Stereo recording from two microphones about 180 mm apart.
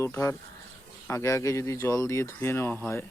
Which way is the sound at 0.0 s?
15° left (ahead or behind).